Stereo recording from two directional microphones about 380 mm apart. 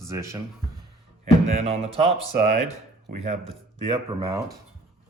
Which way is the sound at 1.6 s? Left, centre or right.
Centre.